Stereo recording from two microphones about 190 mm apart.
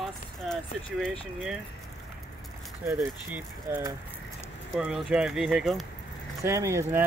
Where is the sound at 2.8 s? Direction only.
10° right (ahead or behind).